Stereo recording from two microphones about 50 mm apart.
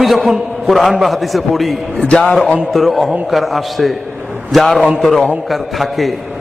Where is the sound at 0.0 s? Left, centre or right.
Centre.